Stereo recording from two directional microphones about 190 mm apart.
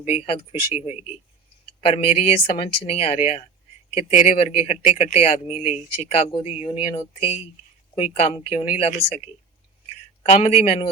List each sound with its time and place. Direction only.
0.0 s speech: 35° left (ahead or behind)
1.6 s speech: 30° left (ahead or behind)
9.9 s a sound: 35° left (ahead or behind)